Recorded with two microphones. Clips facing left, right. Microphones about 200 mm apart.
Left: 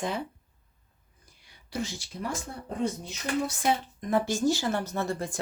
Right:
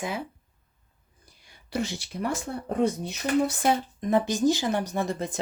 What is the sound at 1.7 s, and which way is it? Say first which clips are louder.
Speech: right 4 dB; 65° right (ahead or behind).